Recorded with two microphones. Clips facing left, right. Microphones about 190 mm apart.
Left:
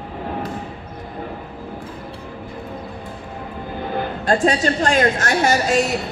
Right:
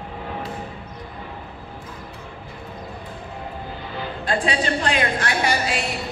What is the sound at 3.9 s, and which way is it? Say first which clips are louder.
A woman's voice: left 5 dB; 50° left (ahead or behind).